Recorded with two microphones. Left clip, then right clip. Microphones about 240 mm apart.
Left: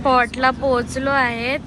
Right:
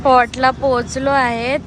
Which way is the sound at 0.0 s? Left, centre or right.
Centre.